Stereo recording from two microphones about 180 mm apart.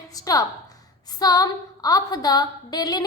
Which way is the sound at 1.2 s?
20° left (ahead or behind).